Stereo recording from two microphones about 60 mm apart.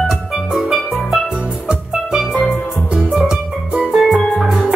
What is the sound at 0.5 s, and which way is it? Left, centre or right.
Music, centre.